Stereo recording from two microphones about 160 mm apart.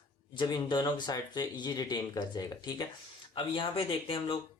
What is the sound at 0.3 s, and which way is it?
Speech, 30° left (ahead or behind).